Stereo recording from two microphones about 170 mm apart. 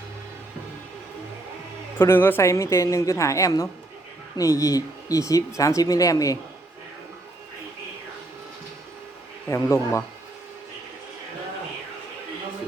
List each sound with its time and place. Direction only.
2.0 s a woman's voice: 15° left (ahead or behind)
9.5 s a woman's voice: 15° left (ahead or behind)